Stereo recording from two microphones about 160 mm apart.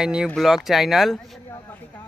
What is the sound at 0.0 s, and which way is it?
Speech, 5° right (ahead or behind).